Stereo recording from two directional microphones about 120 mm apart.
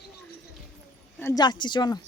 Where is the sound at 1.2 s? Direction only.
30° left (ahead or behind).